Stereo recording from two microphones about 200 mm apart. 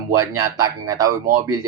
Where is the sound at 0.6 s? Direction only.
15° right (ahead or behind).